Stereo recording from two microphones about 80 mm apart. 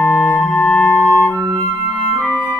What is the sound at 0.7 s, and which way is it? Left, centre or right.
Music, centre.